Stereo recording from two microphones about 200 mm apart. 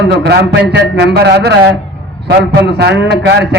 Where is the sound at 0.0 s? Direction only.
60° right (ahead or behind).